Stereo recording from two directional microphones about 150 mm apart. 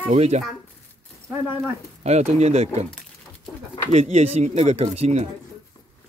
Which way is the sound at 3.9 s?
45° right (ahead or behind).